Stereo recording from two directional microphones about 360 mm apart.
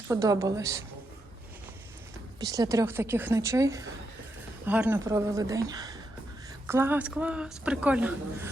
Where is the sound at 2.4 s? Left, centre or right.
Centre.